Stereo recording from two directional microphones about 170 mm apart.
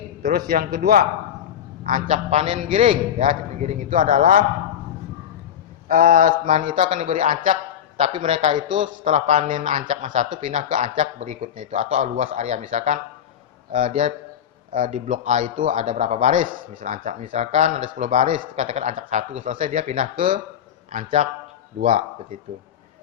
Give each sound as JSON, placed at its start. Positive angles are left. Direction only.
{"t": 0.2, "sound": "a man's voice", "side_deg": -60}
{"t": 5.9, "sound": "a man's voice", "side_deg": -55}
{"t": 12.2, "sound": "a man's voice", "side_deg": -40}